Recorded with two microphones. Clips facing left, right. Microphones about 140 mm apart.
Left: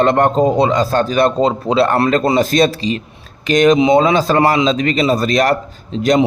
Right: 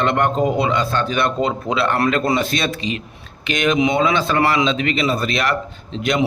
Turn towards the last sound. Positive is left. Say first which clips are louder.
# left 7 dB
turn(degrees=40)  # may be behind; listen again after turning